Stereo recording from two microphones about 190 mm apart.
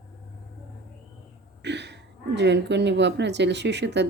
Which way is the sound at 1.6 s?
65° right (ahead or behind).